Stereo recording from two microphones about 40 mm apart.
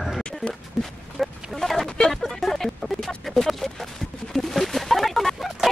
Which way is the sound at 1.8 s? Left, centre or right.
Centre.